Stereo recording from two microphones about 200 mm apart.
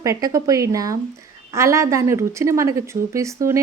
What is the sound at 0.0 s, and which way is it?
A woman's voice, 15° right (ahead or behind).